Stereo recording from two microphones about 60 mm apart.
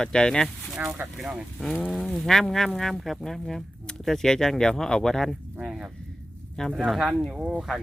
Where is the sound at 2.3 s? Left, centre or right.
Centre.